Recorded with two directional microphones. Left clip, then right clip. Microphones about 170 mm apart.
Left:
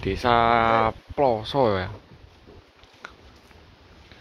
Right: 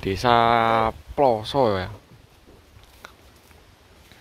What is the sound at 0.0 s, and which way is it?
Speech, 25° right (ahead or behind).